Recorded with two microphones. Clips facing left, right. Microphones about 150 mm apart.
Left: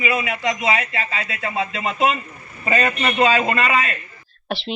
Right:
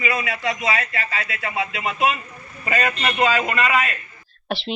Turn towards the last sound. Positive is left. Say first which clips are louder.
# even
turn(degrees=0)  # may be behind; listen again after turning